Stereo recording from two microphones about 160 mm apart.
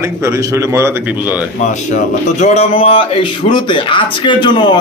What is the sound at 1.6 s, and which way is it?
A man's voice, 50° left (ahead or behind).